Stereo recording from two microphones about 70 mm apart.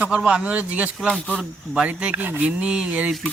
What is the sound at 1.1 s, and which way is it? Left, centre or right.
Speech, centre.